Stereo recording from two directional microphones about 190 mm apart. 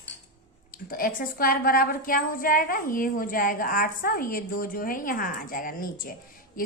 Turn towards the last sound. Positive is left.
turn(degrees=45)  # may be behind; listen again after turning